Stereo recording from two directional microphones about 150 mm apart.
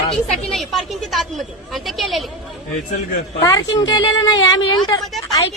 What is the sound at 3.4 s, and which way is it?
Speech, 25° left (ahead or behind).